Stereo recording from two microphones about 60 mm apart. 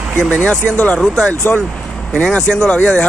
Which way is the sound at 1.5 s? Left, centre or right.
Centre.